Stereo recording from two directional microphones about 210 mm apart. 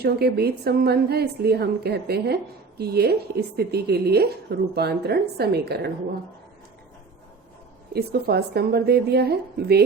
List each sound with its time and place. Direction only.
0.0 s a woman's voice: 50° right (ahead or behind)
7.9 s a woman's voice: 50° right (ahead or behind)